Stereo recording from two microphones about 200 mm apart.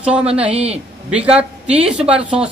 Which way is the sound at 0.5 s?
30° right (ahead or behind).